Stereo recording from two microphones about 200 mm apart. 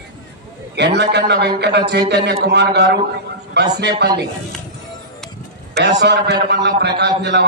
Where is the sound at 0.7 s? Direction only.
55° right (ahead or behind).